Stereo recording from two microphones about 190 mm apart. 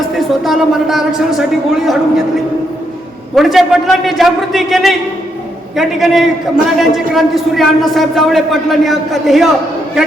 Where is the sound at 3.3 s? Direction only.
Centre (ahead or behind).